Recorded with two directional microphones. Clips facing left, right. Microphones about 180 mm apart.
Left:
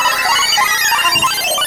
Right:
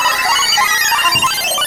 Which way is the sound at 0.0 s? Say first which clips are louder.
Even; centre (ahead or behind).